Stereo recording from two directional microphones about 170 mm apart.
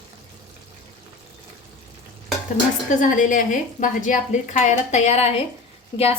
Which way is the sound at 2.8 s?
50° left (ahead or behind).